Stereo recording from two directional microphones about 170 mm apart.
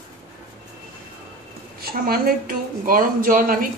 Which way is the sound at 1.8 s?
60° right (ahead or behind).